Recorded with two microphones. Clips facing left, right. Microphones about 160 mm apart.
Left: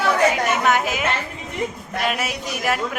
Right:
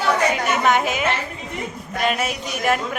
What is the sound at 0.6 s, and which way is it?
Speech, centre (ahead or behind).